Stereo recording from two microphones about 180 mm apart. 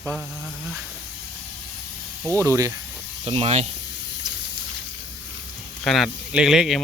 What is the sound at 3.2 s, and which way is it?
Speech, 35° right (ahead or behind).